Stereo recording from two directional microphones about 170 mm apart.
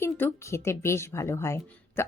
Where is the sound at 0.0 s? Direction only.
15° left (ahead or behind).